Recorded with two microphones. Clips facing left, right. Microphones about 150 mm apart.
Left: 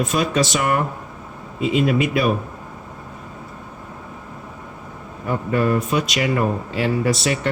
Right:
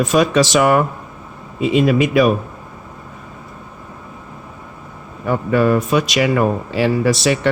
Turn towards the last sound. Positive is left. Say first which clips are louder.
# right 4 dB
turn(degrees=-90)